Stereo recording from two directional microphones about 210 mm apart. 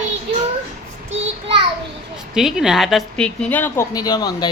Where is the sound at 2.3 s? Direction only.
Centre (ahead or behind).